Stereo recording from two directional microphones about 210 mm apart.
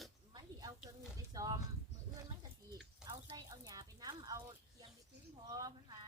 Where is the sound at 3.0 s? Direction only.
20° right (ahead or behind).